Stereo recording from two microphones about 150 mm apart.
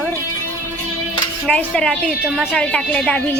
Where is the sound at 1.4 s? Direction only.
5° left (ahead or behind).